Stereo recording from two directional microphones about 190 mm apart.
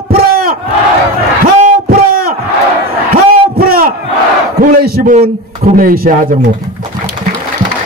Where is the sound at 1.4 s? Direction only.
50° right (ahead or behind).